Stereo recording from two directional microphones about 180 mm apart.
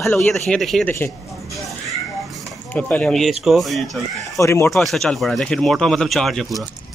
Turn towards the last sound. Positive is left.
turn(degrees=0)  # may be behind; listen again after turning